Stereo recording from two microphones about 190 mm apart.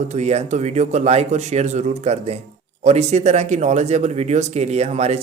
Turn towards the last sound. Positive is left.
turn(degrees=-35)  # may be behind; listen again after turning